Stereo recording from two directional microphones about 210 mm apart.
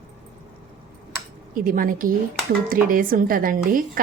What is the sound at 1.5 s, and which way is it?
A woman's voice, 40° right (ahead or behind).